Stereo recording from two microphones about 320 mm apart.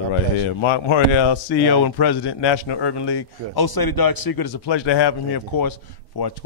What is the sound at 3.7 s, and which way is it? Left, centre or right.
Speech, left.